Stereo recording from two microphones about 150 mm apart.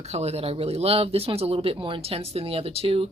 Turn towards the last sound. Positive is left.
turn(degrees=-40)  # may be behind; listen again after turning